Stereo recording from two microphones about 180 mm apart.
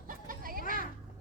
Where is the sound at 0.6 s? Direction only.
45° left (ahead or behind).